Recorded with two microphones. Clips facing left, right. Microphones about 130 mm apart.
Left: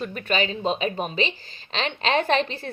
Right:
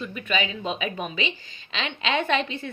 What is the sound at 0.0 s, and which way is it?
A woman's voice, 40° left (ahead or behind).